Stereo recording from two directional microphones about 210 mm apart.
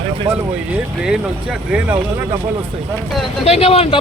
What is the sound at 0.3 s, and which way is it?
Speech, 25° right (ahead or behind).